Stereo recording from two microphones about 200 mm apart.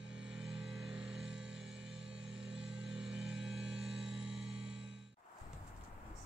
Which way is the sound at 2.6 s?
65° right (ahead or behind).